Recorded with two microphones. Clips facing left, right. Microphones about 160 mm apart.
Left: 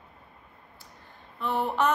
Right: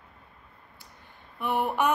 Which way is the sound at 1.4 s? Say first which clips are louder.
Even; 15° right (ahead or behind).